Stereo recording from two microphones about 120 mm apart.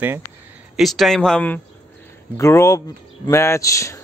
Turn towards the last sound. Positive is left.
turn(degrees=25)  # may be behind; listen again after turning